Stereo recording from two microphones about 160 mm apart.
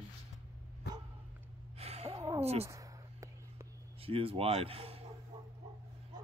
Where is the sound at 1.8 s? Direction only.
40° right (ahead or behind).